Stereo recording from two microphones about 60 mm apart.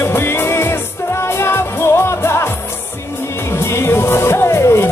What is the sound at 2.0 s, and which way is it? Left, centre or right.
Music, left.